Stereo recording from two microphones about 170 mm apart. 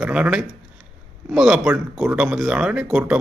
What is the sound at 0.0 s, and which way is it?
A man's voice, 5° right (ahead or behind).